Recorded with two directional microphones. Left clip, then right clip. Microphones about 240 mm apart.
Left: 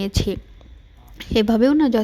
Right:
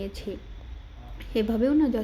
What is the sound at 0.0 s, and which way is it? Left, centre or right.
A woman's voice, left.